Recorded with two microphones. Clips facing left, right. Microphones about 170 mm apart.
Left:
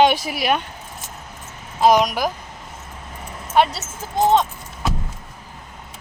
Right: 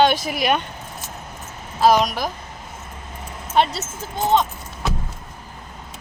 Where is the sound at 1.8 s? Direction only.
15° left (ahead or behind).